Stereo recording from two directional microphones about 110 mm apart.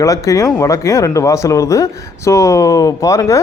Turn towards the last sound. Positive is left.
turn(degrees=30)  # may be behind; listen again after turning